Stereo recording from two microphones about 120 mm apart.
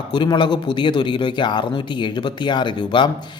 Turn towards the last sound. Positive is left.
turn(degrees=40)  # may be behind; listen again after turning